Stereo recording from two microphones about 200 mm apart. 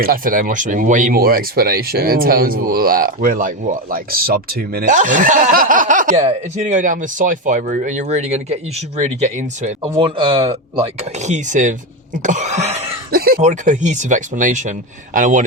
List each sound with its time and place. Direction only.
0.0 s speech: 45° right (ahead or behind)
10.0 s speech: 25° right (ahead or behind)
11.2 s speech: 35° right (ahead or behind)
12.2 s cough: 40° right (ahead or behind)
13.1 s a sound: 50° right (ahead or behind)
13.4 s speech: 40° right (ahead or behind)